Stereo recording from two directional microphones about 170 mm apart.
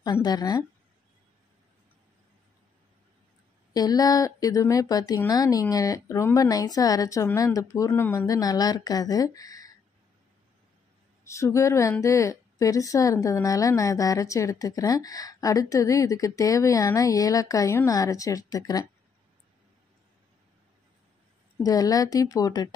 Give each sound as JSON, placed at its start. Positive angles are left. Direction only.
{"t": 0.0, "sound": "a woman's voice", "side_deg": 25}
{"t": 3.7, "sound": "a woman's voice", "side_deg": 20}
{"t": 11.2, "sound": "a woman's voice", "side_deg": 15}
{"t": 21.6, "sound": "a woman's voice", "side_deg": 20}